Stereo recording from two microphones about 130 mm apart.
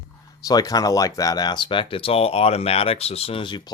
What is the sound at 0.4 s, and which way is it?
Speech, 30° left (ahead or behind).